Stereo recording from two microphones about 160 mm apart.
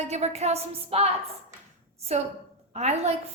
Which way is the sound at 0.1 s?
40° right (ahead or behind).